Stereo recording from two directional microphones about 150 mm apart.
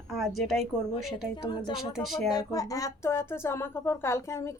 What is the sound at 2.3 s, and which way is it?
Speech, 25° left (ahead or behind).